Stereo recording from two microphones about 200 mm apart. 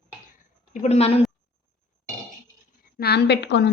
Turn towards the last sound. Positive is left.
turn(degrees=60)  # may be behind; listen again after turning